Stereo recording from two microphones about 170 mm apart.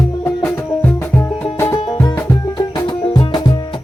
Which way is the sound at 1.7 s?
30° left (ahead or behind).